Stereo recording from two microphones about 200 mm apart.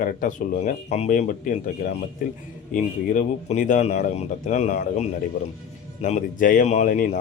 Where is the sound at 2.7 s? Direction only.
40° left (ahead or behind).